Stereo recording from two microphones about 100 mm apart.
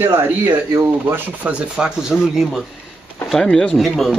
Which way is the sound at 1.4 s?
10° right (ahead or behind).